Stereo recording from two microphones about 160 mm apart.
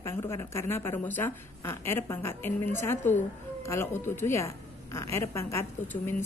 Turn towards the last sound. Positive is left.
turn(degrees=15)  # may be behind; listen again after turning